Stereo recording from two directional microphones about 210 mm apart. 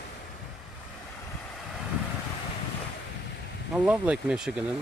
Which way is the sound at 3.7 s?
5° right (ahead or behind).